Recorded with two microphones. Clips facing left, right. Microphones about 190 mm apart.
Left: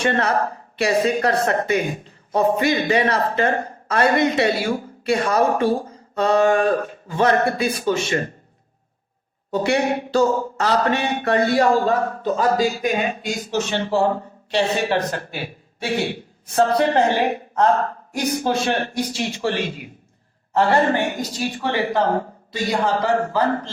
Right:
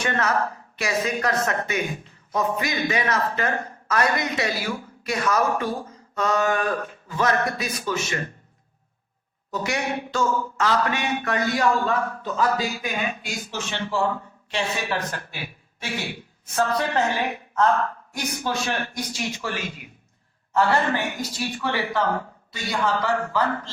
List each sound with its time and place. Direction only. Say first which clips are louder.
0.0 s speech: left 4 dB; 30° left (ahead or behind)
9.5 s speech: left 7 dB; 30° left (ahead or behind)